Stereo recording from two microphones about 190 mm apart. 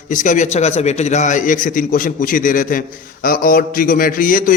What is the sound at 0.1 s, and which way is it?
A man's voice, 40° left (ahead or behind).